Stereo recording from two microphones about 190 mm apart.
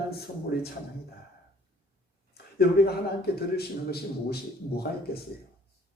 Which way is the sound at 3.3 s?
55° left (ahead or behind).